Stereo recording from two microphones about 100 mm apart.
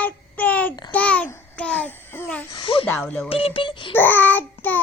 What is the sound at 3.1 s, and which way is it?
Speech, 15° left (ahead or behind).